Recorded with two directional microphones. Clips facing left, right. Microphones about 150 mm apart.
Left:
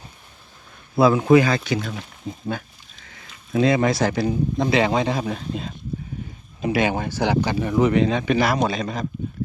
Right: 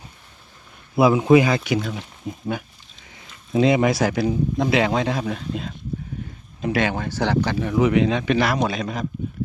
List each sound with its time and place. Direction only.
0.9 s speech: 15° right (ahead or behind)
3.1 s a sound: 20° right (ahead or behind)
4.2 s speech: centre (ahead or behind)